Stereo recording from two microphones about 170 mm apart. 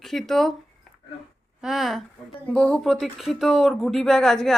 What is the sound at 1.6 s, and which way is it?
Speech, centre (ahead or behind).